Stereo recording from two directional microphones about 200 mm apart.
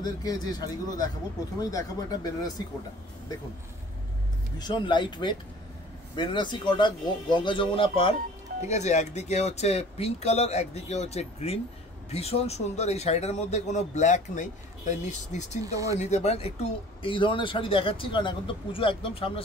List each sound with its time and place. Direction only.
0.0 s speech: 20° left (ahead or behind)
4.6 s speech: 20° left (ahead or behind)
15.6 s speech: 15° right (ahead or behind)
16.0 s speech: 35° left (ahead or behind)